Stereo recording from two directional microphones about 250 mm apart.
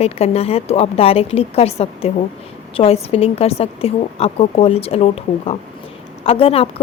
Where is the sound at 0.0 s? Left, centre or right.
Left.